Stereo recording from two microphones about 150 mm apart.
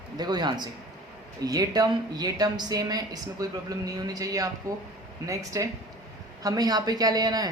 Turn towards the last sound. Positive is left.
turn(degrees=-25)  # may be behind; listen again after turning